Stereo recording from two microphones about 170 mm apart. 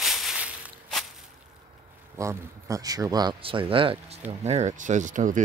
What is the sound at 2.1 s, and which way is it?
Speech, 20° right (ahead or behind).